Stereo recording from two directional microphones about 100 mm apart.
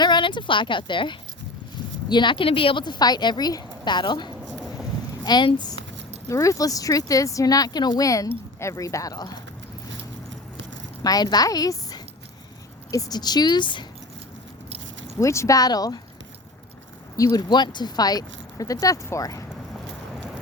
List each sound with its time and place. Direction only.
0.0 s a woman's voice: 50° left (ahead or behind)
6.2 s speech: 30° left (ahead or behind)
11.0 s a woman's voice: 40° left (ahead or behind)
15.2 s speech: 30° left (ahead or behind)
17.3 s speech: 45° left (ahead or behind)